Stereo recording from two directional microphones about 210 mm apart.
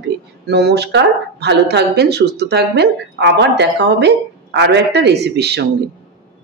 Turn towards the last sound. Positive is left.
turn(degrees=-50)  # may be behind; listen again after turning